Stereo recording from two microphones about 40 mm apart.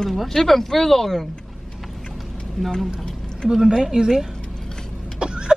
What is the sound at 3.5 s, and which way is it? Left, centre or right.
Speech, centre.